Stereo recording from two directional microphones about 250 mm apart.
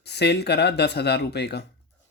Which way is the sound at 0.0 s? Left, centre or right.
Left.